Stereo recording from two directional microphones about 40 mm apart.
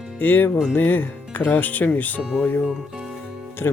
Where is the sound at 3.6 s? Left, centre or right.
Left.